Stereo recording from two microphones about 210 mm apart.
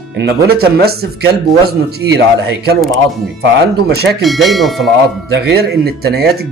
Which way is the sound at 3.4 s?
50° right (ahead or behind).